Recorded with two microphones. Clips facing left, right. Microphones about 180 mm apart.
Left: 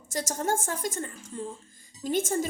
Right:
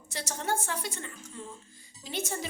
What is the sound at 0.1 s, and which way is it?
A woman's voice, 45° left (ahead or behind).